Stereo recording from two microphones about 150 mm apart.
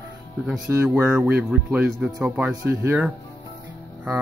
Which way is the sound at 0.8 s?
10° right (ahead or behind).